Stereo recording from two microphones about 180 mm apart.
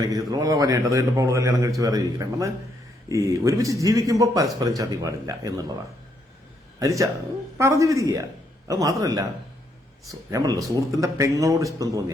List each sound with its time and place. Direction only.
0.1 s a man's voice: 20° right (ahead or behind)
6.7 s a man's voice: 15° right (ahead or behind)